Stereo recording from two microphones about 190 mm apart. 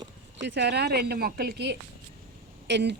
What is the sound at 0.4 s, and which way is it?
Speech, 65° right (ahead or behind).